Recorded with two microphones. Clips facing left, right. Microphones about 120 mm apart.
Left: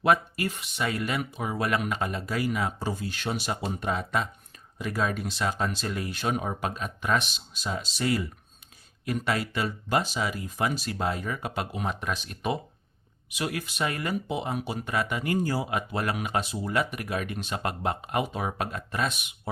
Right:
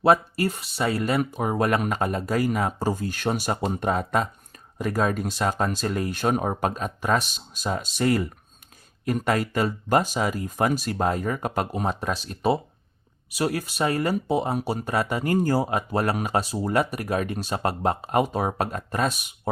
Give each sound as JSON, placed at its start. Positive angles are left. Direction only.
{"t": 0.0, "sound": "speech", "side_deg": -35}